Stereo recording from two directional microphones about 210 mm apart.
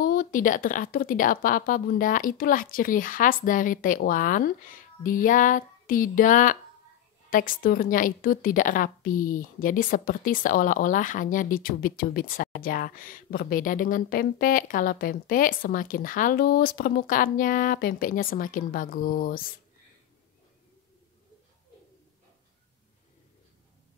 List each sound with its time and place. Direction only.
0.0 s a woman's voice: 40° left (ahead or behind)